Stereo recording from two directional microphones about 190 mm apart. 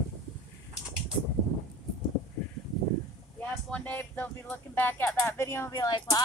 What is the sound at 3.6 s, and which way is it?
Speech, 5° left (ahead or behind).